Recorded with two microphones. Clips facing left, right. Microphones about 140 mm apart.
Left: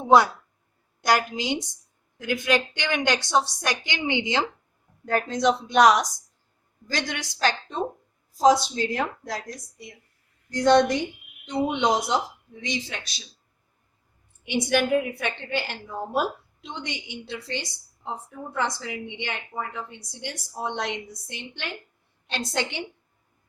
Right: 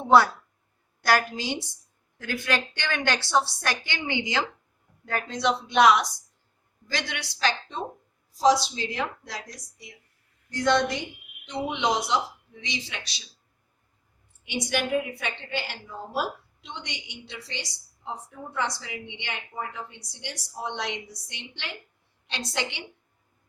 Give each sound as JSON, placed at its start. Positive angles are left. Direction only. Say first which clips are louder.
{"t": 0.0, "sound": "a woman's voice", "louder": "left 1 dB", "side_deg": 15}
{"t": 5.0, "sound": "a woman's voice", "louder": "left 4 dB", "side_deg": 45}
{"t": 14.4, "sound": "a woman's voice", "louder": "left 5 dB", "side_deg": 55}